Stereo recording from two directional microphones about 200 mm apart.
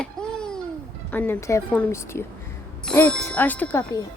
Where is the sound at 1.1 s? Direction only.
10° left (ahead or behind).